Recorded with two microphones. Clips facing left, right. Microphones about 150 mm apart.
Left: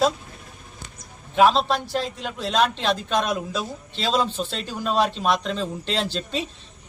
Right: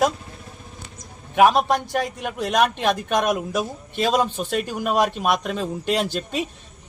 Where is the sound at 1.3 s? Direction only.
15° right (ahead or behind).